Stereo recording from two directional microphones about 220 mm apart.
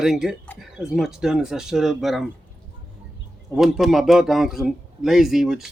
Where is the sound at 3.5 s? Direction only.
Centre (ahead or behind).